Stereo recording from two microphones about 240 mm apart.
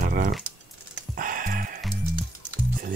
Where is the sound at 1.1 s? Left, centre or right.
Right.